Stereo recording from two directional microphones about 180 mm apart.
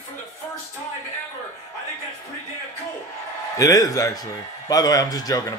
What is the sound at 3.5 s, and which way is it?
A man's voice, 20° left (ahead or behind).